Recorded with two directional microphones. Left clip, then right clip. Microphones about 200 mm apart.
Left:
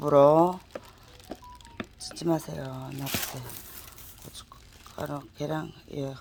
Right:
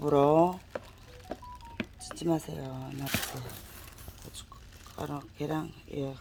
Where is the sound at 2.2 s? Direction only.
30° left (ahead or behind).